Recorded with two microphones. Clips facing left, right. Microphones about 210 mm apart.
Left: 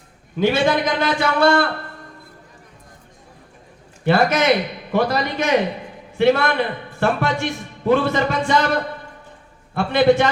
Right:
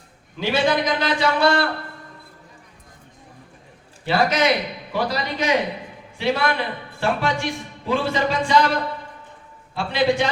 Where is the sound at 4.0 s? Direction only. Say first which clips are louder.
Left 3 dB; 50° left (ahead or behind).